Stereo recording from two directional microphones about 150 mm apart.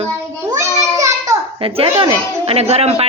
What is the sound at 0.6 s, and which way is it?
Child singing, 20° right (ahead or behind).